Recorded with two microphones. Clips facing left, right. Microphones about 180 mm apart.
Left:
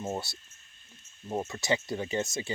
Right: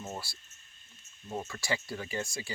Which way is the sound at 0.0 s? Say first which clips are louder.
Left 7 dB; 20° left (ahead or behind).